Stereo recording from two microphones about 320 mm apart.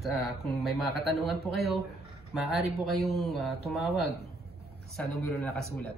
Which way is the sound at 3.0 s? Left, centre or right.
Centre.